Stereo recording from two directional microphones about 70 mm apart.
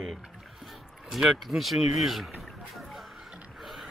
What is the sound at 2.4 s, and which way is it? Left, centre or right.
Music, centre.